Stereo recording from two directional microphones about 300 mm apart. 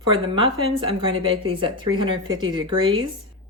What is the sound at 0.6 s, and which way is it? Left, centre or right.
A woman's voice, centre.